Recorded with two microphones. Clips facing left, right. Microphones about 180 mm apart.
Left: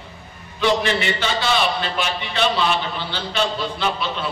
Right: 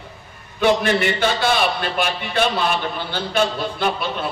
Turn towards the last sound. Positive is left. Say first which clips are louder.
# right 2 dB
turn(degrees=-50)  # may be behind; listen again after turning